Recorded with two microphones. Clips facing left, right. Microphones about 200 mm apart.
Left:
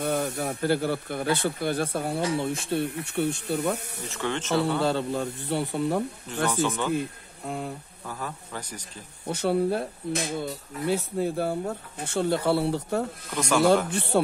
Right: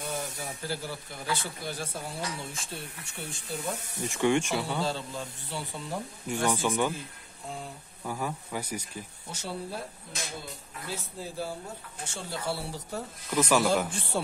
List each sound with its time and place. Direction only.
0.0 s speech: 60° left (ahead or behind)
4.0 s speech: 15° right (ahead or behind)
4.6 s speech: 60° left (ahead or behind)
6.2 s speech: 10° right (ahead or behind)
7.0 s speech: 60° left (ahead or behind)
8.0 s speech: 10° right (ahead or behind)
9.2 s speech: 60° left (ahead or behind)
13.3 s speech: 5° right (ahead or behind)
13.8 s speech: 65° left (ahead or behind)